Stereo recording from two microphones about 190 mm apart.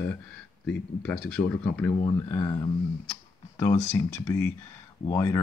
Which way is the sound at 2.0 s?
20° left (ahead or behind).